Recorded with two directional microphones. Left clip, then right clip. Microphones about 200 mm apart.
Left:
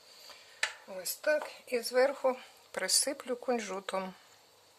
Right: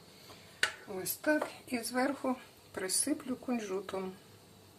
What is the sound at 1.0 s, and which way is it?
Speech, 45° left (ahead or behind).